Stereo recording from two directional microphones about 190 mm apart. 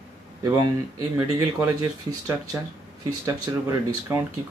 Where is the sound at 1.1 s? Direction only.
15° right (ahead or behind).